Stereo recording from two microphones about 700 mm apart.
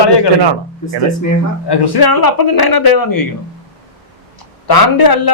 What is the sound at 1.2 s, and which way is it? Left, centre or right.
Speech, left.